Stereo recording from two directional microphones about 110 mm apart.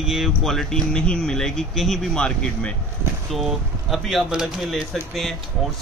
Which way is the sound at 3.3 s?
Centre (ahead or behind).